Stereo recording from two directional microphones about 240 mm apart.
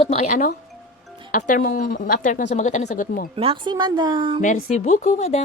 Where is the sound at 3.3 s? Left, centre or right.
Right.